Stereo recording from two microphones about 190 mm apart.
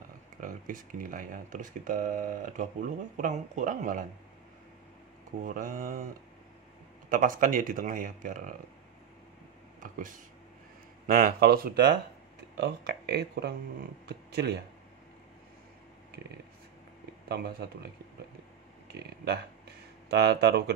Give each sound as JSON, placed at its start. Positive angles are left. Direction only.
{"t": 0.4, "sound": "speech", "side_deg": -45}
{"t": 5.4, "sound": "speech", "side_deg": -45}
{"t": 7.1, "sound": "speech", "side_deg": -45}
{"t": 9.8, "sound": "speech", "side_deg": -45}
{"t": 17.3, "sound": "speech", "side_deg": -55}
{"t": 20.1, "sound": "speech", "side_deg": -60}